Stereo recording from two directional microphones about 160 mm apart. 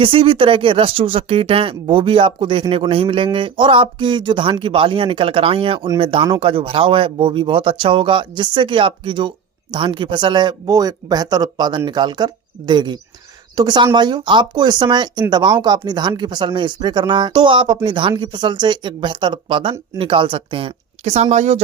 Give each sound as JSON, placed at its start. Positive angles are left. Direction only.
{"t": 0.0, "sound": "speech", "side_deg": -35}